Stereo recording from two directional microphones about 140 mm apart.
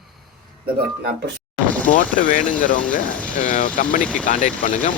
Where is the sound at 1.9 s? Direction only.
80° left.